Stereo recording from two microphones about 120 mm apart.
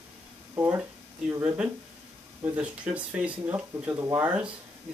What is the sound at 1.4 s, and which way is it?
Speech, 10° right (ahead or behind).